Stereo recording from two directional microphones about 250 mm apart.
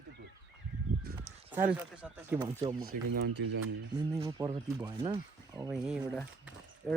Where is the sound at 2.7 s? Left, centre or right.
Right.